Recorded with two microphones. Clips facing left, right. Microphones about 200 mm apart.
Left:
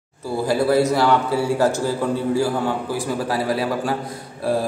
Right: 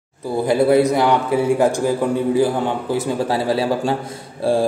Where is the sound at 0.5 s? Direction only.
20° right (ahead or behind).